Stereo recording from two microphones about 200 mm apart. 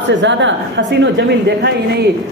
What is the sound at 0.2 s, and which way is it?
A man's voice, 65° right (ahead or behind).